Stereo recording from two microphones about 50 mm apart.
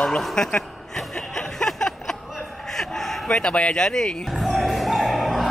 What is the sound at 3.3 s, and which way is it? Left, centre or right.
Speech, centre.